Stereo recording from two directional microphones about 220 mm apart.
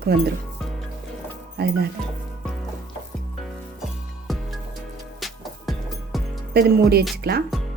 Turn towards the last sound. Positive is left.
turn(degrees=-45)  # may be behind; listen again after turning